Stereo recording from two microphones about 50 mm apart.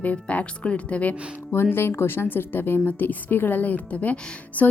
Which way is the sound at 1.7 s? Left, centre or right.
Left.